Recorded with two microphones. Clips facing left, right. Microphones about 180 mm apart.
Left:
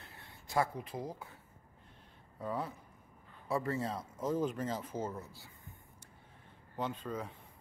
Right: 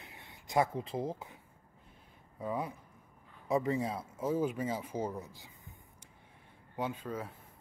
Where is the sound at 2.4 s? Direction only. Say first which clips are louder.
Right 2 dB; 10° right (ahead or behind).